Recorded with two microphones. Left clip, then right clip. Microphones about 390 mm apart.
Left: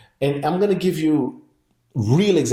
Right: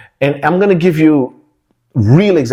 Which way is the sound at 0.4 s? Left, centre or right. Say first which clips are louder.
Right 9 dB; right.